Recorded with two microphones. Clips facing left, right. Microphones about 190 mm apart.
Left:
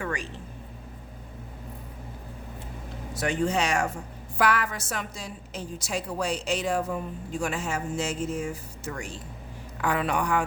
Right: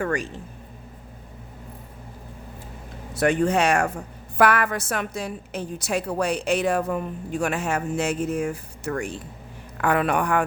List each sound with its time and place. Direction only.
0.0 s speech: 45° right (ahead or behind)
3.2 s a woman's voice: 60° right (ahead or behind)